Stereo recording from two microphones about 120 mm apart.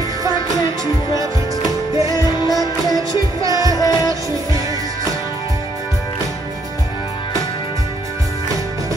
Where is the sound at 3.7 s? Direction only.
30° left (ahead or behind).